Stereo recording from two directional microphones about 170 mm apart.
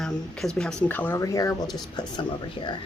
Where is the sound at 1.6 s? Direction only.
Centre (ahead or behind).